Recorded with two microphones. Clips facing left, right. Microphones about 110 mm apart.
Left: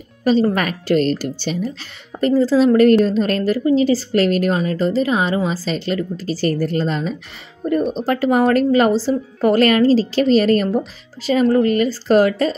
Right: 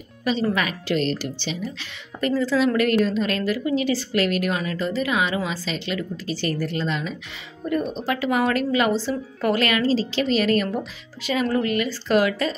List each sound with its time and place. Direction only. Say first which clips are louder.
0.2 s speech: left 7 dB; 40° left (ahead or behind)